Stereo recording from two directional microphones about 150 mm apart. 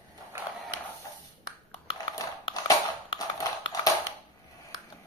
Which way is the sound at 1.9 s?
30° left (ahead or behind).